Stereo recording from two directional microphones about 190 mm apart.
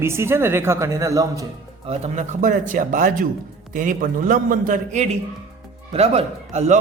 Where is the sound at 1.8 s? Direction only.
35° right (ahead or behind).